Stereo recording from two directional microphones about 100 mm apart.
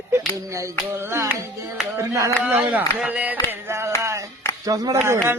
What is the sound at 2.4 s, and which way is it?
Speech, 10° right (ahead or behind).